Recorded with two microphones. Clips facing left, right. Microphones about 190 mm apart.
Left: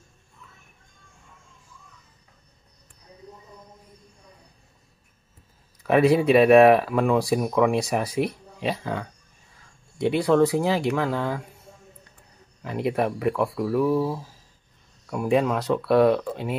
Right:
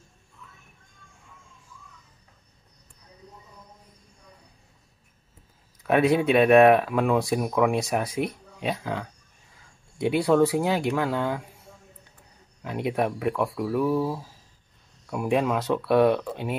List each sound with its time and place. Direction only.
5.9 s speech: centre (ahead or behind)
12.6 s speech: centre (ahead or behind)